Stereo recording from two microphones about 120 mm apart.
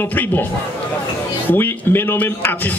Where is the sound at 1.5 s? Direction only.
15° left (ahead or behind).